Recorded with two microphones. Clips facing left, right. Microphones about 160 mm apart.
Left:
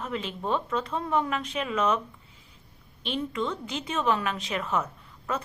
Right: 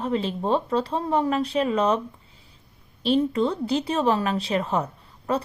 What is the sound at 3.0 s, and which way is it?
A woman's voice, 35° right (ahead or behind).